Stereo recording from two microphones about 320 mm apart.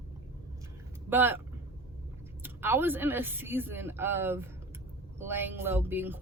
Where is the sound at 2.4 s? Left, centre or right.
Centre.